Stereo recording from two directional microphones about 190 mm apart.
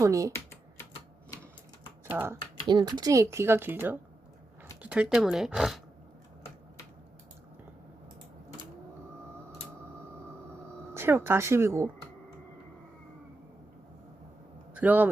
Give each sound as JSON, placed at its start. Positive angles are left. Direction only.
{"t": 0.0, "sound": "speech", "side_deg": -15}
{"t": 2.0, "sound": "speech", "side_deg": -10}
{"t": 2.6, "sound": "speech", "side_deg": -25}
{"t": 10.9, "sound": "speech", "side_deg": -10}
{"t": 14.7, "sound": "a man's voice", "side_deg": -10}